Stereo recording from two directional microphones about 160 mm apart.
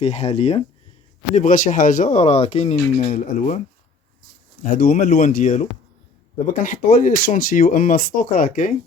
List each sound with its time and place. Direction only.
0.0 s speech: 40° left (ahead or behind)
1.4 s speech: 55° left (ahead or behind)
4.6 s speech: 60° left (ahead or behind)